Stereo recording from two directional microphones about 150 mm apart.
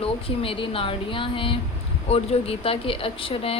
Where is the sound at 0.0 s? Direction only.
35° left (ahead or behind).